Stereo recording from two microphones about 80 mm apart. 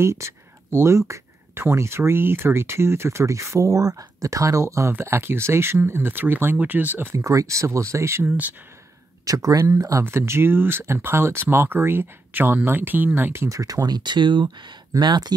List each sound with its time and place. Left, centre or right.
0.0 s speech: right
7.0 s speech: right
9.2 s speech: right
10.0 s speech: right
13.6 s speech: right
15.0 s speech: right